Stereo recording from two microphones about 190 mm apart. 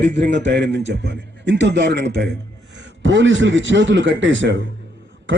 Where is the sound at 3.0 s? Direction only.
75° right (ahead or behind).